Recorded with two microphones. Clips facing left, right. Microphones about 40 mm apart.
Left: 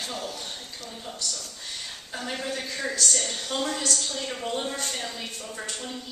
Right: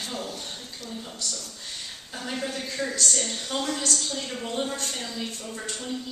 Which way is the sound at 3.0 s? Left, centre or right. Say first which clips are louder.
Even; centre.